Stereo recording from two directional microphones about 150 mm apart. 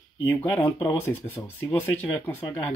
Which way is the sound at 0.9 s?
15° left (ahead or behind).